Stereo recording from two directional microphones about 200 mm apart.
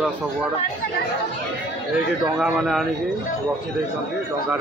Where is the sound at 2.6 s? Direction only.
Centre (ahead or behind).